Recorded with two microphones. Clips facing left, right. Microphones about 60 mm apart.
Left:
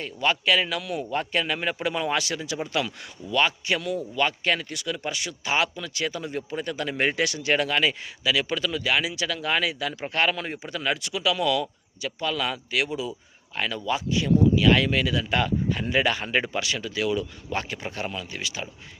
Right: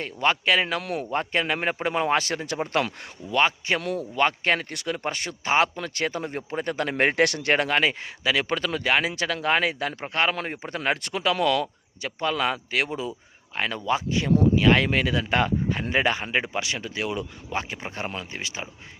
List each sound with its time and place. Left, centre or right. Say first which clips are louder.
0.0 s a man's voice: right 1 dB; right
3.8 s speech: right 3 dB; right
10.3 s a man's voice: right 1 dB; right
16.2 s speech: left 1 dB; centre